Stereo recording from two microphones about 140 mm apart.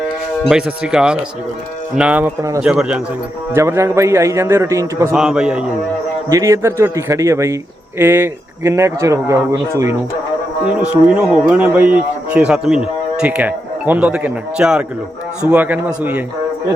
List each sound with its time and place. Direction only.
0.5 s a man's voice: 5° right (ahead or behind)
3.5 s speech: 20° right (ahead or behind)
5.1 s a man's voice: 5° right (ahead or behind)
6.2 s speech: 25° right (ahead or behind)
11.2 s a man's voice: 5° right (ahead or behind)